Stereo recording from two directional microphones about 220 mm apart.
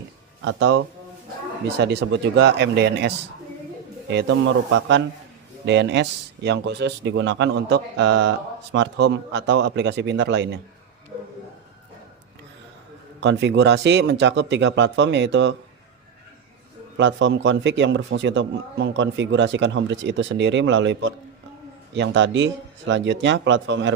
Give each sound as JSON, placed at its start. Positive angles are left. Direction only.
{"t": 0.4, "sound": "a man's voice", "side_deg": -55}
{"t": 4.1, "sound": "a man's voice", "side_deg": -55}
{"t": 13.1, "sound": "speech", "side_deg": -55}
{"t": 17.0, "sound": "a man's voice", "side_deg": -55}